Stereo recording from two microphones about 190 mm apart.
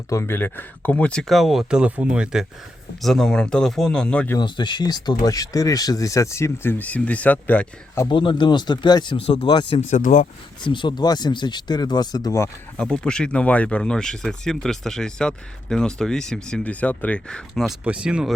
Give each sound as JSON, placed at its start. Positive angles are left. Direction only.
{"t": 0.1, "sound": "speech", "side_deg": 15}
{"t": 4.4, "sound": "speech", "side_deg": 25}
{"t": 8.1, "sound": "speech", "side_deg": 25}
{"t": 9.9, "sound": "speech", "side_deg": 45}
{"t": 10.7, "sound": "speech", "side_deg": 25}
{"t": 12.7, "sound": "speech", "side_deg": 5}